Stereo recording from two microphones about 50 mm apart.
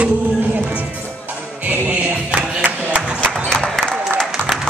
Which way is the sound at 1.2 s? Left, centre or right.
Right.